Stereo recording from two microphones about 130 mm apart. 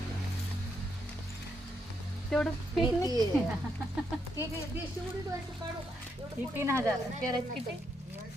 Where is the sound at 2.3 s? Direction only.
Centre (ahead or behind).